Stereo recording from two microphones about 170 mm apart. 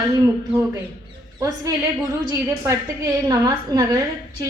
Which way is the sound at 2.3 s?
20° right (ahead or behind).